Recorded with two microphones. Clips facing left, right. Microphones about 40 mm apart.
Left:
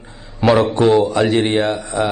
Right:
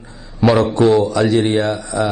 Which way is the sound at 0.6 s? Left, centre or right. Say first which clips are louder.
Even; left.